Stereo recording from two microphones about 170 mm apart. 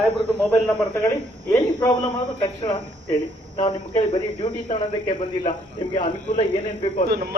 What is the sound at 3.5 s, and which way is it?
Speech, 25° left (ahead or behind).